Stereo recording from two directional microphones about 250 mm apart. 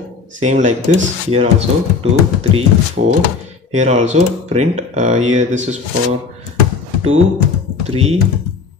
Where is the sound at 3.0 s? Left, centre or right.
Right.